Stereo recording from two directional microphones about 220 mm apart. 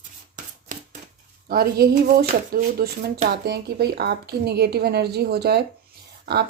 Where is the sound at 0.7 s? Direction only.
35° right (ahead or behind).